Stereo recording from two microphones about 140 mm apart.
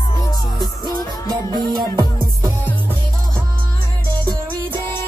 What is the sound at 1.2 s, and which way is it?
Music, 30° right (ahead or behind).